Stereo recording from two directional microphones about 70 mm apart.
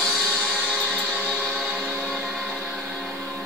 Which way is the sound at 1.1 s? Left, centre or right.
Centre.